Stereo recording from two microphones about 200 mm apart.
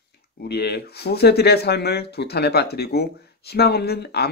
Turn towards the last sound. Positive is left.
turn(degrees=55)  # may be behind; listen again after turning